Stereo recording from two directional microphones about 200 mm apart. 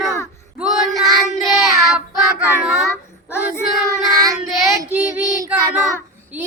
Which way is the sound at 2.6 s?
Centre (ahead or behind).